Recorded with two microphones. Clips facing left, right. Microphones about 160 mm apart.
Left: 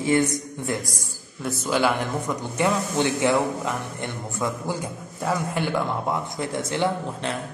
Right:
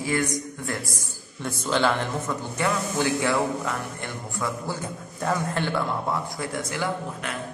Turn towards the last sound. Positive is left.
turn(degrees=25)  # may be behind; listen again after turning